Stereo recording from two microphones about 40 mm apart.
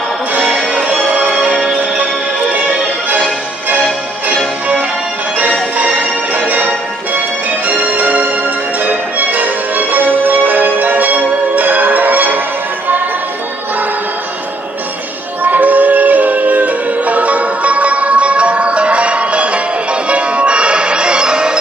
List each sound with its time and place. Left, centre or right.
0.4 s music: centre
0.8 s music: right
6.3 s music: right
15.4 s music: right